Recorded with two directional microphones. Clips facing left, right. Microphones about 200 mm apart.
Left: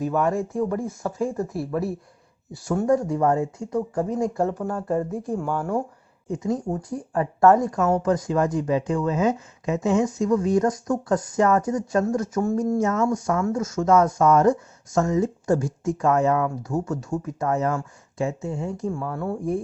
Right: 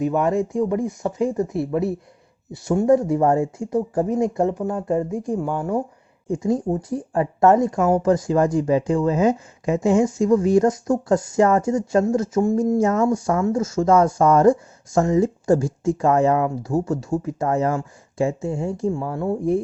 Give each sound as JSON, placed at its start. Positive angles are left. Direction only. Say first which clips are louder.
{"t": 0.0, "sound": "speech", "louder": "right 3 dB", "side_deg": -20}
{"t": 6.2, "sound": "speech", "louder": "right 4 dB", "side_deg": -30}
{"t": 12.7, "sound": "speech", "louder": "right 3 dB", "side_deg": -35}